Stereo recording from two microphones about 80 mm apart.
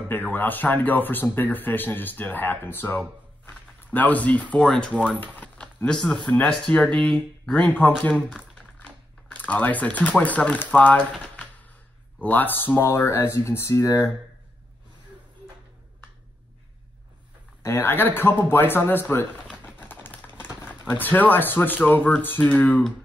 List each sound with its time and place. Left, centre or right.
0.1 s speech: left
3.4 s a sound: left
4.6 s speech: centre
5.2 s crumpling: centre
5.9 s speech: centre
6.3 s speech: centre
8.5 s typing: centre
12.2 s speech: left
17.6 s speech: left
19.5 s a sound: left
20.3 s typewriter: left
20.9 s speech: left